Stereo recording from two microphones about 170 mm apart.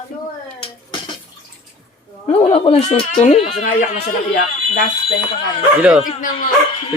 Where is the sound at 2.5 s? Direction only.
35° left (ahead or behind).